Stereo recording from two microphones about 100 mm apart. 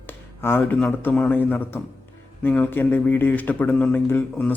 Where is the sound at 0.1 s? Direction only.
20° left (ahead or behind).